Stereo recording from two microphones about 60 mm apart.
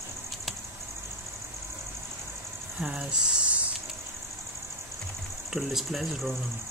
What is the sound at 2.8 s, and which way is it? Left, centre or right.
Speech, centre.